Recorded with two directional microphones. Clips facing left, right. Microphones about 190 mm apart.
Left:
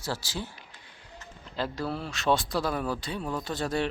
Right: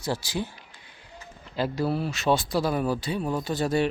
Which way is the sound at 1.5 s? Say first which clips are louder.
Right 5 dB; 10° right (ahead or behind).